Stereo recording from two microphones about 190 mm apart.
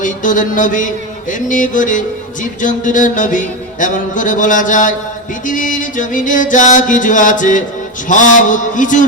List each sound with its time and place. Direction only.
0.0 s music: 45° left (ahead or behind)